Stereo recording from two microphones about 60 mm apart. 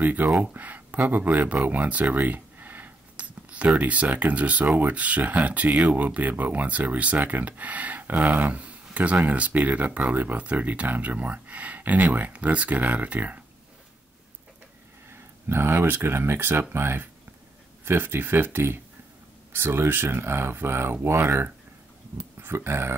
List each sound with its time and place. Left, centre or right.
0.0 s speech: right
15.0 s speech: right